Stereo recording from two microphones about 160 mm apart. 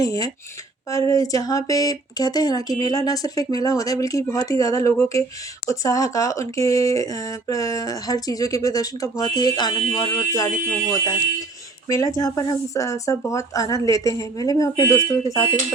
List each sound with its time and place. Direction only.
0.0 s speech: 20° left (ahead or behind)